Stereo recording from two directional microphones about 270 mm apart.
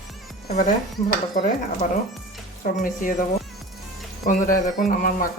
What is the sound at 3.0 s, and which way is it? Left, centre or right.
Speech, left.